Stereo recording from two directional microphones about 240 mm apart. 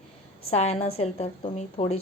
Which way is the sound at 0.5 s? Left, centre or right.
Left.